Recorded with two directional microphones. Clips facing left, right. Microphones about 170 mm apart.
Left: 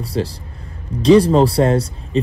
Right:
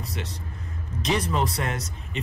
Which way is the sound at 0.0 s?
30° left (ahead or behind).